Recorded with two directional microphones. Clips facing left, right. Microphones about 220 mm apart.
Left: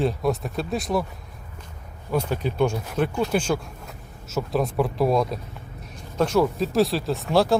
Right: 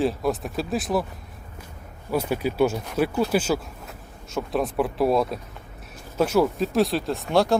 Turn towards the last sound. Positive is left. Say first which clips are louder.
# left 1 dB
turn(degrees=0)  # may be behind; listen again after turning